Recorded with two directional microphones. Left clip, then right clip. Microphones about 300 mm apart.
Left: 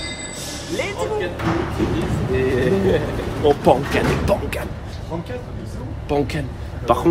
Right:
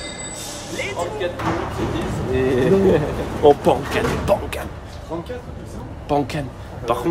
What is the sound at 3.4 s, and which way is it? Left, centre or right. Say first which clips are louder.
Speech: right 1 dB; centre.